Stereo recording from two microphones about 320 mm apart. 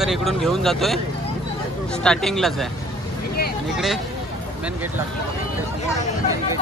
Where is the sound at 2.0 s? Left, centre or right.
Centre.